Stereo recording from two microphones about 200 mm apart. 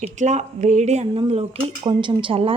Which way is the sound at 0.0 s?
35° right (ahead or behind).